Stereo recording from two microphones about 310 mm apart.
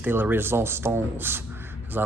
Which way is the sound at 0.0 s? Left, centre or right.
Centre.